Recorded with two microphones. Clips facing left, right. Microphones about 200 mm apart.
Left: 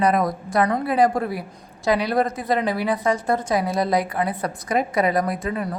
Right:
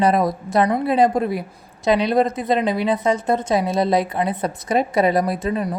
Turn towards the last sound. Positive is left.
turn(degrees=-25)  # may be behind; listen again after turning